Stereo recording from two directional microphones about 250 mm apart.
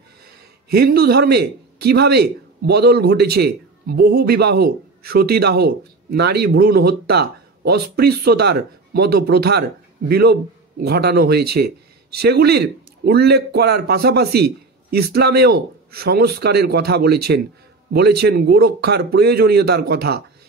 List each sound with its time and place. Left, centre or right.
0.7 s a man's voice: right